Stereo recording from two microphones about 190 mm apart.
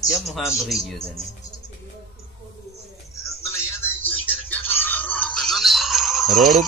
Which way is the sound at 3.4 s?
10° left (ahead or behind).